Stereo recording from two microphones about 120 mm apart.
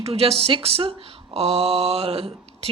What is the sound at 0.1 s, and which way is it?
Speech, 55° right (ahead or behind).